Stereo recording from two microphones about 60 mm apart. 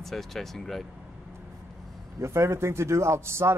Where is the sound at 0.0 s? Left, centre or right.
Centre.